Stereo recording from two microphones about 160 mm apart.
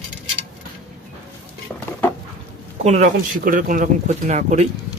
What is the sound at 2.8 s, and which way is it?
Speech, 45° right (ahead or behind).